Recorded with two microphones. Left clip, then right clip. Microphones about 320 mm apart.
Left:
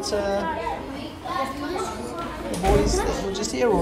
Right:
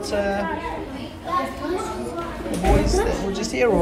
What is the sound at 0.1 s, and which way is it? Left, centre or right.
Speech, centre.